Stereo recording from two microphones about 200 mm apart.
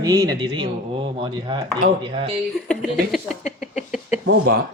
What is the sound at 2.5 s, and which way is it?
Speech, centre (ahead or behind).